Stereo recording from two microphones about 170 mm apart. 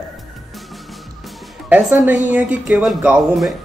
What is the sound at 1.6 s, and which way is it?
A woman's voice, 10° right (ahead or behind).